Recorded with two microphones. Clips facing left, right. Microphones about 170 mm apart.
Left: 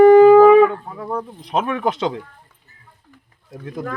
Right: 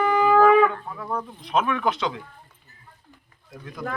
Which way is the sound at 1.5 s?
35° left (ahead or behind).